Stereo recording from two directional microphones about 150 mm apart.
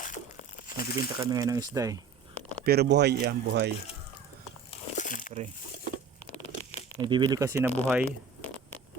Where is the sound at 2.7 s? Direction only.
90° right.